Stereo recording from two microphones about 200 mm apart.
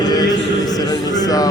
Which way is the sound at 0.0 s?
20° left (ahead or behind).